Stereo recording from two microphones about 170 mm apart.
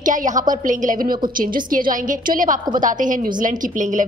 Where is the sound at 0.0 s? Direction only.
50° right (ahead or behind).